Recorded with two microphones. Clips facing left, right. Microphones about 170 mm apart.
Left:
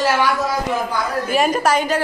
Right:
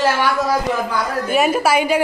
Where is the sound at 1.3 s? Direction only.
5° right (ahead or behind).